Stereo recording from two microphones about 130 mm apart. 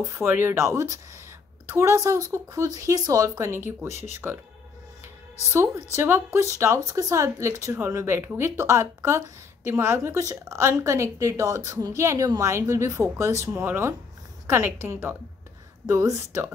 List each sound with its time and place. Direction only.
0.0 s a woman's voice: 20° right (ahead or behind)
5.5 s a woman's voice: 20° right (ahead or behind)